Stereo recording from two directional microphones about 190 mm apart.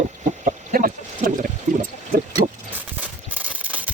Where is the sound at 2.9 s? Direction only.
10° right (ahead or behind).